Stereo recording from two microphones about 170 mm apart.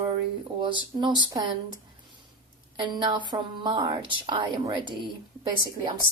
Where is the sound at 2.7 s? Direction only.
25° right (ahead or behind).